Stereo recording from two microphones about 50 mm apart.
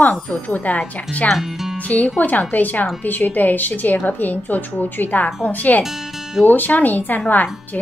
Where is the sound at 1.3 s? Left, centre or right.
Centre.